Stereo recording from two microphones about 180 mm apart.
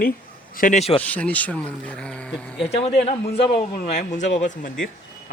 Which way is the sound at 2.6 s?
35° left (ahead or behind).